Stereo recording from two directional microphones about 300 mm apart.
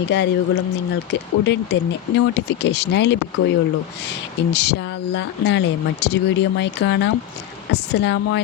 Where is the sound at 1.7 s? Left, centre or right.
Left.